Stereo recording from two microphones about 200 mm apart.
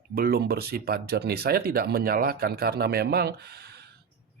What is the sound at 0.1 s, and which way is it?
Speech, 50° right (ahead or behind).